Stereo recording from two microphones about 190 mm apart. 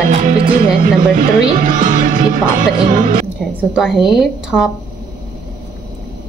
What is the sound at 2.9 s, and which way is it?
Speech, 45° right (ahead or behind).